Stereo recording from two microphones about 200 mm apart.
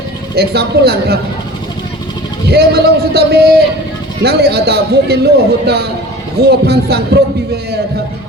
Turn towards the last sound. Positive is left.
turn(degrees=-50)  # may be behind; listen again after turning